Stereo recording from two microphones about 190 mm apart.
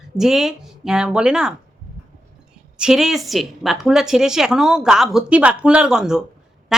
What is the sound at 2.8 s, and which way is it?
Speech, 5° right (ahead or behind).